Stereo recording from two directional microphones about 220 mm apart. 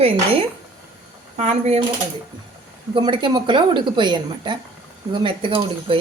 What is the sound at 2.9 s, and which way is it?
A woman's voice, 20° right (ahead or behind).